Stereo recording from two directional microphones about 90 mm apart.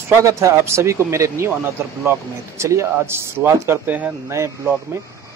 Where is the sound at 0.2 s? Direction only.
35° right (ahead or behind).